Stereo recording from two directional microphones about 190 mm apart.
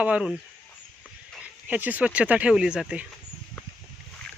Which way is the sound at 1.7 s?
10° right (ahead or behind).